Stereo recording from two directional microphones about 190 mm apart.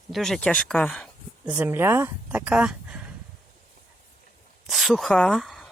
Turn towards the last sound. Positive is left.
turn(degrees=0)  # may be behind; listen again after turning